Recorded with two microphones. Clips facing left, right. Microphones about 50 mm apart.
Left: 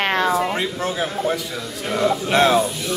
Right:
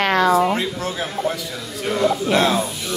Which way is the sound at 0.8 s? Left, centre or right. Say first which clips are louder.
Left 2 dB; left.